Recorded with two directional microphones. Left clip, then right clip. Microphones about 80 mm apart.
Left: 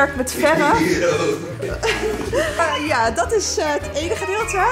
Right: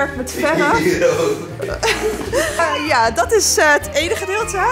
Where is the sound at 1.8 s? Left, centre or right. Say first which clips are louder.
Right 3 dB; centre.